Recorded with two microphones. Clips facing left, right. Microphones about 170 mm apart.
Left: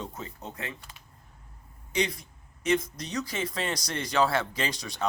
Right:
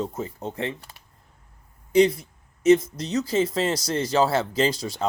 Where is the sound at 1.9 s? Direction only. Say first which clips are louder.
Right 11 dB; 30° right (ahead or behind).